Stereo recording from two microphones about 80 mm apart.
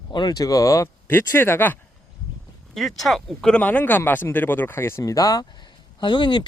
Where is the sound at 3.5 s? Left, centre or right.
Centre.